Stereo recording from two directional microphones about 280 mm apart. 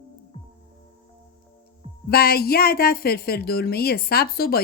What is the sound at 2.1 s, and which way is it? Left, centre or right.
Speech, left.